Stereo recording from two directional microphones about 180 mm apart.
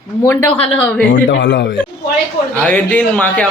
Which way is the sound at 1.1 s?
80° left.